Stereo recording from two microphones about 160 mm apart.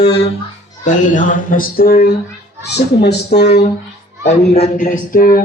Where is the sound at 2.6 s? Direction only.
90° left.